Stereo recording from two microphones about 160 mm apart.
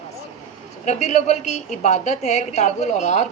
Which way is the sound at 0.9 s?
45° left (ahead or behind).